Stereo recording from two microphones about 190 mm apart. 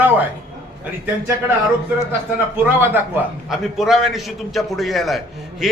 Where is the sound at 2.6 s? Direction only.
10° right (ahead or behind).